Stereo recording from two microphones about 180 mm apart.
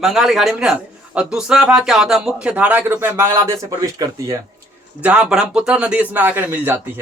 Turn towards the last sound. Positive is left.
turn(degrees=-10)  # may be behind; listen again after turning